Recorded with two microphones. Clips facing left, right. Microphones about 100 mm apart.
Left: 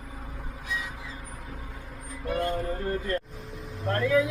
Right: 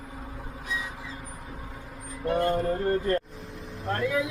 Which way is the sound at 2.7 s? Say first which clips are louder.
Right 4 dB; 30° right (ahead or behind).